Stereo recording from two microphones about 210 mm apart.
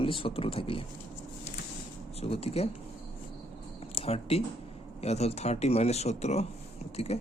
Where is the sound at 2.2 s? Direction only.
30° left (ahead or behind).